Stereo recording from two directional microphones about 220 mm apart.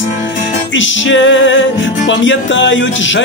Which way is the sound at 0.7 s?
60° left (ahead or behind).